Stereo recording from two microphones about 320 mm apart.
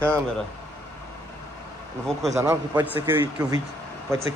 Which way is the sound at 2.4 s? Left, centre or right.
Centre.